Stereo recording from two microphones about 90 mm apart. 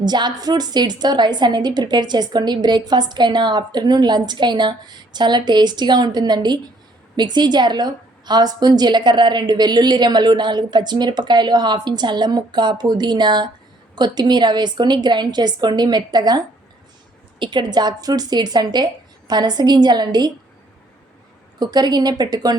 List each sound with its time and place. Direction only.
0.0 s a woman's voice: 50° right (ahead or behind)
17.4 s a woman's voice: 60° right (ahead or behind)
21.6 s a woman's voice: 50° right (ahead or behind)